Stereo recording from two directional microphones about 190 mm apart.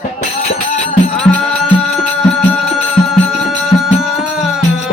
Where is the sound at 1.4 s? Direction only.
5° left (ahead or behind).